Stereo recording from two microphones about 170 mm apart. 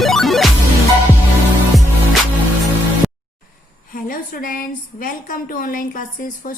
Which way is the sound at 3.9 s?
55° left (ahead or behind).